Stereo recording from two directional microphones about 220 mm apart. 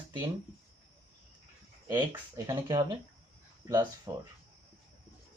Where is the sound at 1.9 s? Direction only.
10° right (ahead or behind).